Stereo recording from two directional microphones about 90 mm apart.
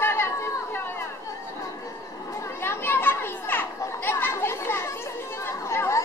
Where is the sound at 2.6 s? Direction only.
25° left (ahead or behind).